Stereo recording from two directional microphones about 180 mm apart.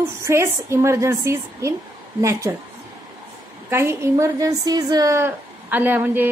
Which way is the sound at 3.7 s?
15° right (ahead or behind).